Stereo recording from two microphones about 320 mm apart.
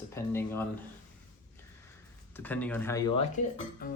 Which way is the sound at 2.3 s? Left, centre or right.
Centre.